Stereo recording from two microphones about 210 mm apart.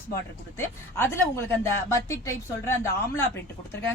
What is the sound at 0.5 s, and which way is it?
Speech, 10° left (ahead or behind).